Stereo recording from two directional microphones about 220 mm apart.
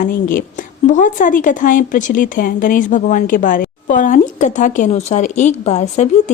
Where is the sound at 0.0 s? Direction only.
40° left (ahead or behind).